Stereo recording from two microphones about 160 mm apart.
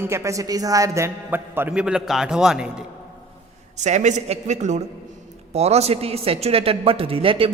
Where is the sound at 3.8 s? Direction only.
45° right (ahead or behind).